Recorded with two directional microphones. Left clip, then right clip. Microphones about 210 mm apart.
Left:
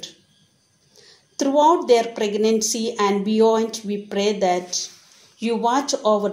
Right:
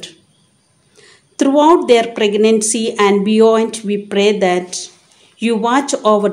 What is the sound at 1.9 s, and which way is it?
Speech, 50° right (ahead or behind).